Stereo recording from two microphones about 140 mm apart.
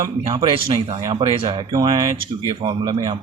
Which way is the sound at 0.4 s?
40° right (ahead or behind).